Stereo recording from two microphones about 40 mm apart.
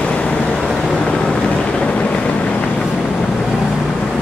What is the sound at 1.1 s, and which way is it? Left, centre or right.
Vehicle, left.